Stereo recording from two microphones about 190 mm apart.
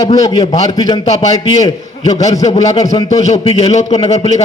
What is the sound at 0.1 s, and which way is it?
Speech, 20° left (ahead or behind).